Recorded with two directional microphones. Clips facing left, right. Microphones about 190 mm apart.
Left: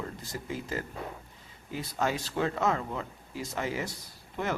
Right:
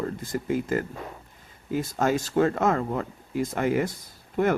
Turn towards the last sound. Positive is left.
turn(degrees=-50)  # may be behind; listen again after turning